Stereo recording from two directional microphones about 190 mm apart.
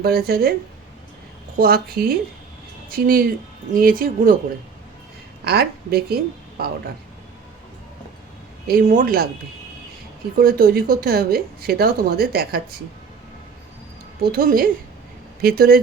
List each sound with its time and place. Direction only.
0.0 s a woman's voice: 55° right (ahead or behind)
1.5 s speech: 50° right (ahead or behind)
5.5 s a woman's voice: 55° right (ahead or behind)
8.6 s speech: 45° right (ahead or behind)
10.3 s speech: 50° right (ahead or behind)
14.2 s speech: 50° right (ahead or behind)